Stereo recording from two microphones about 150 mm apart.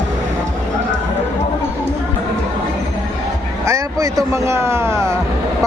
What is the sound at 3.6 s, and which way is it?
Speech, 20° right (ahead or behind).